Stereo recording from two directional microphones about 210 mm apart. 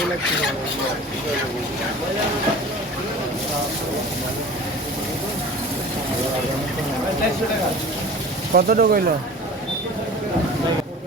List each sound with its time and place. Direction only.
8.5 s speech: 45° right (ahead or behind)